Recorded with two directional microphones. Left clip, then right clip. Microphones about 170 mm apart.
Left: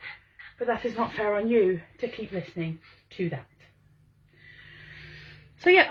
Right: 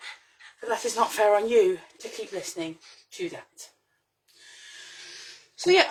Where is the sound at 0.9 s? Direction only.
40° right (ahead or behind).